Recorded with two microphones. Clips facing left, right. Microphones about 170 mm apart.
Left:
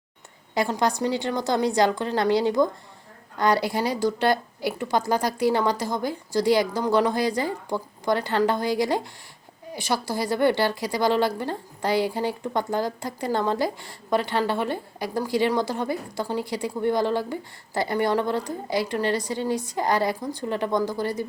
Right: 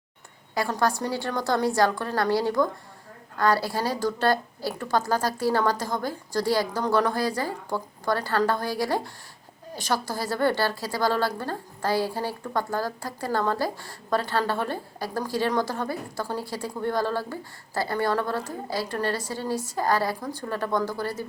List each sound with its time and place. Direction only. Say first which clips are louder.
0.5 s a woman's voice: left 2 dB; 20° left (ahead or behind)